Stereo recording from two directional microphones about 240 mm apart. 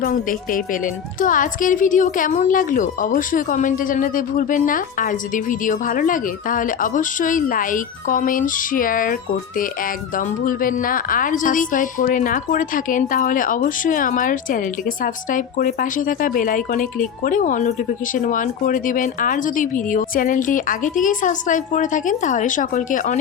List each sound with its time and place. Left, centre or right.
0.0 s a woman's voice: left
10.2 s a woman's voice: left